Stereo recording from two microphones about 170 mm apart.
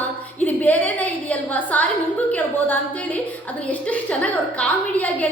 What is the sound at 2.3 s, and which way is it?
A woman's voice, 10° left (ahead or behind).